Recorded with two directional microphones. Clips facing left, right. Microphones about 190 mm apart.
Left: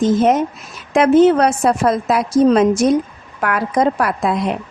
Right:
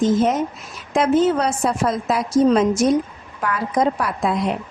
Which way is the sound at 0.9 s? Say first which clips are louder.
Left 6 dB; 65° left (ahead or behind).